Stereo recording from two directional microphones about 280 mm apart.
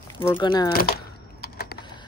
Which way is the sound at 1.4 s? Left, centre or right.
Left.